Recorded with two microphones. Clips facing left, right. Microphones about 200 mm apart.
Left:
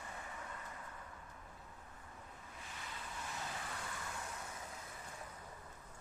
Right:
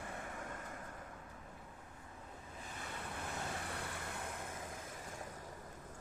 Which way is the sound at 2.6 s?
55° right (ahead or behind).